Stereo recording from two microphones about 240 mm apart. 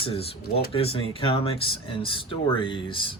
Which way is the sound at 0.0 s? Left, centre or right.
Left.